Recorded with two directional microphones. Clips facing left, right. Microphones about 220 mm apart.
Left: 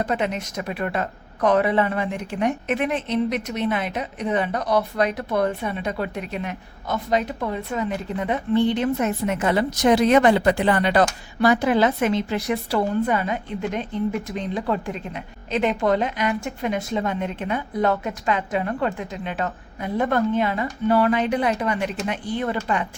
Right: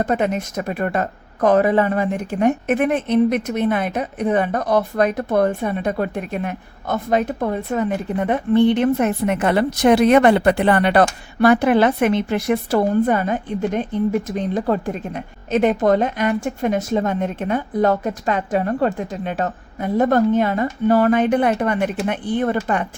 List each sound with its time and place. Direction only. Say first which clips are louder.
0.0 s speech: right 4 dB; 50° right (ahead or behind)